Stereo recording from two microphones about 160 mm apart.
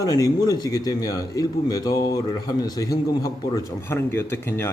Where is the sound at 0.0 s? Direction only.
20° left (ahead or behind).